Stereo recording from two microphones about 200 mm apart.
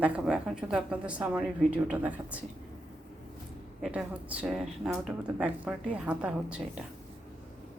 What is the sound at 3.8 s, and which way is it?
A woman's voice, 5° right (ahead or behind).